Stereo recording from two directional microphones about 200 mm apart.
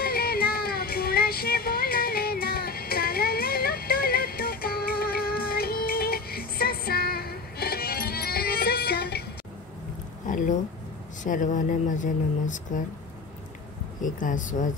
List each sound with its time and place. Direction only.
0.0 s child singing: 50° left (ahead or behind)
10.2 s a sound: 40° left (ahead or behind)
11.2 s speech: 40° left (ahead or behind)
14.0 s speech: 40° left (ahead or behind)